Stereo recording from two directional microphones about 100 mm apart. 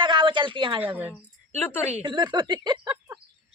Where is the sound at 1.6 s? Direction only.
20° left (ahead or behind).